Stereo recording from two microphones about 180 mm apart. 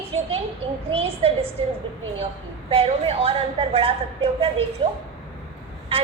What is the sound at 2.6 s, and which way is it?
A woman's voice, 30° right (ahead or behind).